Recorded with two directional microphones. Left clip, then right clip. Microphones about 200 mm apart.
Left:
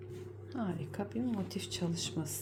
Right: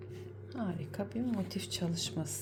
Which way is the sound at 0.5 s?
Centre (ahead or behind).